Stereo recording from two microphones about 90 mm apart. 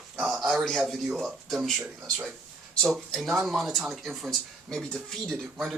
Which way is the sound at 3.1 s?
Centre (ahead or behind).